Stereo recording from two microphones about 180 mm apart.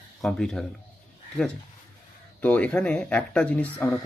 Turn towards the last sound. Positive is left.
turn(degrees=10)  # may be behind; listen again after turning